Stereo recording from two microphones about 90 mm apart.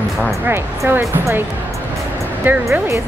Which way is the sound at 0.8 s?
25° right (ahead or behind).